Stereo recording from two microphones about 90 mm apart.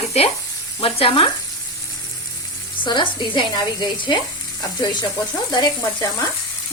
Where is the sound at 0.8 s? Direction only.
90° left.